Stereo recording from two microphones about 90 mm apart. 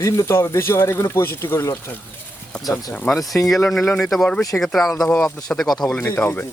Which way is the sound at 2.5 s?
10° left (ahead or behind).